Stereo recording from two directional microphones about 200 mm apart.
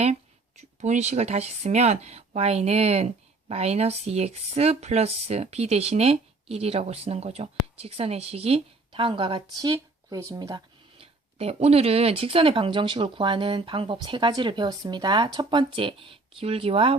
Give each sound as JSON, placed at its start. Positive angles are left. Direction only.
{"t": 0.0, "sound": "speech", "side_deg": -35}